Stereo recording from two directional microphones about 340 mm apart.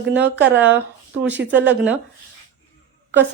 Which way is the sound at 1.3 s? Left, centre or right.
Right.